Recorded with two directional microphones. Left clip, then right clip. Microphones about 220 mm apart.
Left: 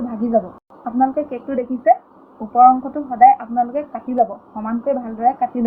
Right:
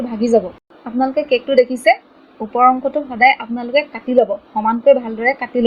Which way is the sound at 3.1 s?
50° right (ahead or behind).